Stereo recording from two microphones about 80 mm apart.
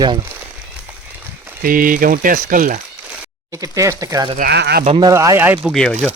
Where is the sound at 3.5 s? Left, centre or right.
Right.